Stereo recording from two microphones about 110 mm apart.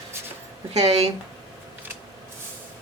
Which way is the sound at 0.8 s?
75° right (ahead or behind).